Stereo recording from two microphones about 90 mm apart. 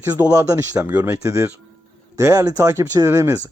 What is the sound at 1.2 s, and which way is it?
Speech, 35° right (ahead or behind).